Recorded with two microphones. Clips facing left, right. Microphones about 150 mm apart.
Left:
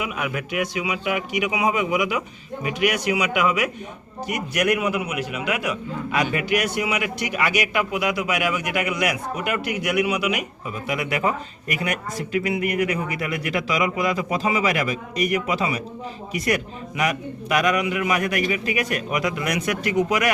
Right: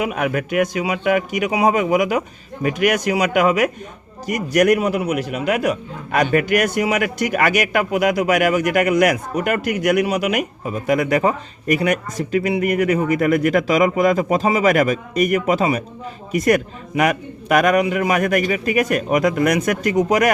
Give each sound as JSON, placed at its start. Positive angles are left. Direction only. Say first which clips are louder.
{"t": 0.0, "sound": "a man's voice", "louder": "right 7 dB", "side_deg": -45}